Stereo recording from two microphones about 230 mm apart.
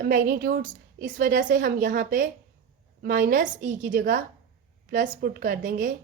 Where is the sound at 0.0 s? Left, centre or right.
Right.